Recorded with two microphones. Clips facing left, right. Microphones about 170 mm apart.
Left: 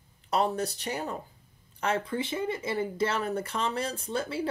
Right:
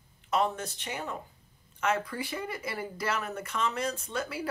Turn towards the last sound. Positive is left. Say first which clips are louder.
# left 3 dB
turn(degrees=30)  # may be behind; listen again after turning